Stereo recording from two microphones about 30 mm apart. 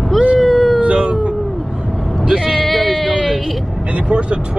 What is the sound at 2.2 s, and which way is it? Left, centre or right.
Vehicle, right.